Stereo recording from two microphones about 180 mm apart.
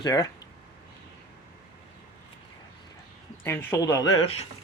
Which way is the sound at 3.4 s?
10° left (ahead or behind).